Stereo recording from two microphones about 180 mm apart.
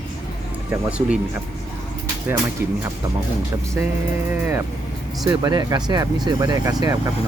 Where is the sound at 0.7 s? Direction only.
5° right (ahead or behind).